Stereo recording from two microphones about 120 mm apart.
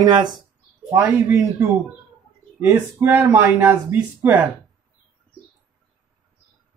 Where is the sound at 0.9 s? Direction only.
20° right (ahead or behind).